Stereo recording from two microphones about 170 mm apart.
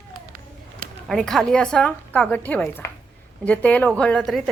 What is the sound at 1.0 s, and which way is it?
A woman's voice, 5° left (ahead or behind).